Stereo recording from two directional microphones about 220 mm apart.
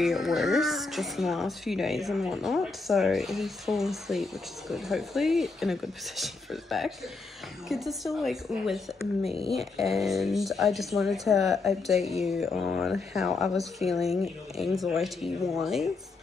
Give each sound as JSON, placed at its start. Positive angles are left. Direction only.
{"t": 0.0, "sound": "speech", "side_deg": 0}
{"t": 9.3, "sound": "speech", "side_deg": 25}
{"t": 9.8, "sound": "speech", "side_deg": 0}